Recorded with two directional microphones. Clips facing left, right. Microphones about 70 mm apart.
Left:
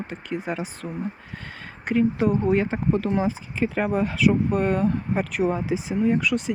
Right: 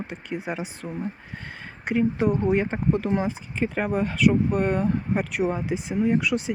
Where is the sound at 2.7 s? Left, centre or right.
Centre.